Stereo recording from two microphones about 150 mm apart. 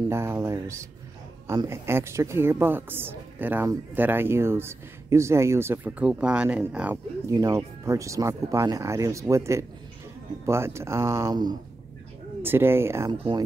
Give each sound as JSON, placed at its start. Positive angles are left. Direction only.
{"t": 0.1, "sound": "a woman's voice", "side_deg": -15}
{"t": 7.2, "sound": "a woman's voice", "side_deg": -20}
{"t": 12.4, "sound": "a woman's voice", "side_deg": -15}